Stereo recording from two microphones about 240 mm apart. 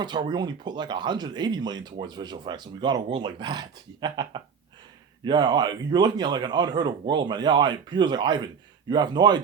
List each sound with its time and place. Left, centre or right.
0.0 s speech: centre